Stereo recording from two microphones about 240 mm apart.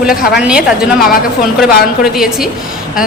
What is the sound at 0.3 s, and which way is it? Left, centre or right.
Speech, centre.